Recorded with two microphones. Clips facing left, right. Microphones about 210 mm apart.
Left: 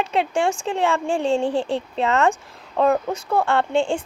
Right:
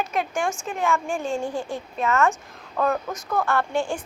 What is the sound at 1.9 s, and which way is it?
A woman's voice, 30° left (ahead or behind).